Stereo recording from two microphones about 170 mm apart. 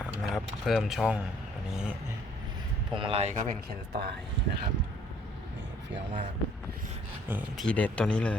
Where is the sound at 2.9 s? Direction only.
30° right (ahead or behind).